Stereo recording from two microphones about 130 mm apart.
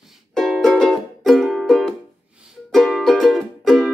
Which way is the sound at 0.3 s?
Centre (ahead or behind).